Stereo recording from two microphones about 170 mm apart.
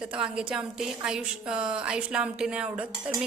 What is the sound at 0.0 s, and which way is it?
A woman's voice, 5° right (ahead or behind).